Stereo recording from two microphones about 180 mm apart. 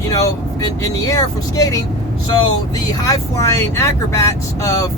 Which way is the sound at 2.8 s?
20° left (ahead or behind).